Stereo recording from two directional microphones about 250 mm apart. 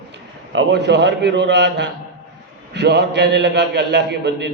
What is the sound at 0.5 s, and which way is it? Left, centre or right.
A man's voice, right.